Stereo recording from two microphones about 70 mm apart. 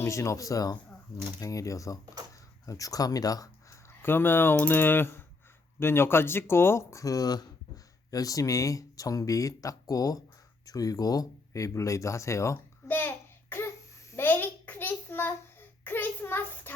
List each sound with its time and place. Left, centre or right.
0.0 s speech: left
4.0 s speech: left
12.5 s babbling: left
14.3 s a sound: left